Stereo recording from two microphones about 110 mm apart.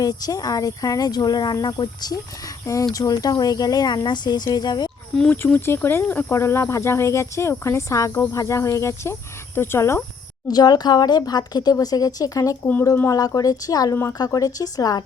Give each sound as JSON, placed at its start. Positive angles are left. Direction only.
{"t": 0.0, "sound": "speech", "side_deg": 35}
{"t": 5.3, "sound": "speech", "side_deg": 20}
{"t": 10.5, "sound": "speech", "side_deg": 40}
{"t": 13.9, "sound": "speech", "side_deg": 25}